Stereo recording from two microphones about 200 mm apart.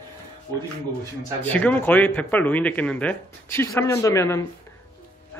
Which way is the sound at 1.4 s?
5° left (ahead or behind).